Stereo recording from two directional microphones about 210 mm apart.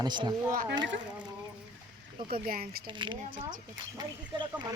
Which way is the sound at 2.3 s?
45° right (ahead or behind).